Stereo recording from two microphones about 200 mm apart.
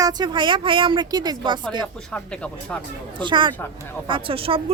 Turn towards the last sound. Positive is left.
turn(degrees=-25)  # may be behind; listen again after turning